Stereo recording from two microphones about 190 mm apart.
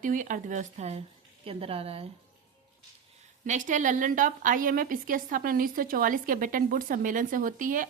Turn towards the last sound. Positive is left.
turn(degrees=-45)  # may be behind; listen again after turning